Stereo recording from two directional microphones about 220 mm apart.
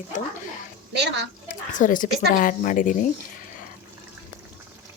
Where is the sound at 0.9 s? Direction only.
50° right (ahead or behind).